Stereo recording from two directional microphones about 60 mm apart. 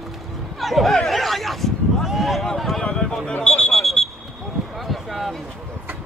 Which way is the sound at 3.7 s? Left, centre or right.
Centre.